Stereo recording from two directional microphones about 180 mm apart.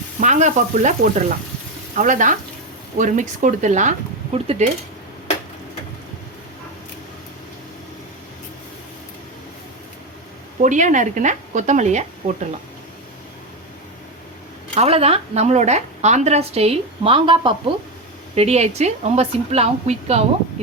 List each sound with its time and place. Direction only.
0.2 s speech: 40° right (ahead or behind)
2.0 s a woman's voice: 45° right (ahead or behind)
10.6 s speech: 45° right (ahead or behind)
14.8 s a woman's voice: 35° right (ahead or behind)